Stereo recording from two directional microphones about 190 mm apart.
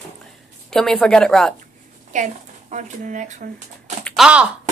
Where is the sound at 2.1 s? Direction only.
40° right (ahead or behind).